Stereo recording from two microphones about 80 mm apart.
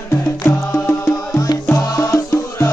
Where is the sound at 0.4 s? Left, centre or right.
Left.